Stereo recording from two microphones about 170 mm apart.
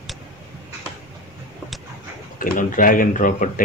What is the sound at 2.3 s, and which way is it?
Speech, 55° left (ahead or behind).